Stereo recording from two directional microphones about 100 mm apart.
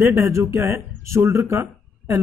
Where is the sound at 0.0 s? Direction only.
30° right (ahead or behind).